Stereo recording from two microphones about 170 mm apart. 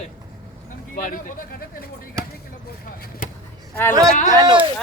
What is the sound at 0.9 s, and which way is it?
Speech, 55° left (ahead or behind).